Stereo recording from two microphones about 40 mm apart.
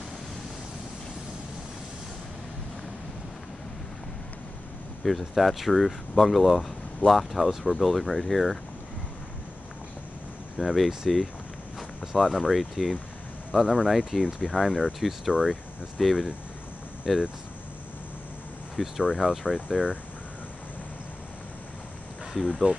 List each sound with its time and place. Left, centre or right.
5.0 s speech: centre
10.6 s speech: centre
13.6 s speech: centre
13.8 s speech: centre
18.8 s speech: centre
22.3 s speech: centre